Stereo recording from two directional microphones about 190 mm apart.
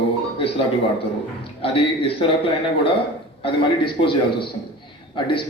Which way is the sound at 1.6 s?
30° left (ahead or behind).